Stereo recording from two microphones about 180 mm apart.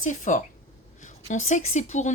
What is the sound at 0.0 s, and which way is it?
Speech, 45° left (ahead or behind).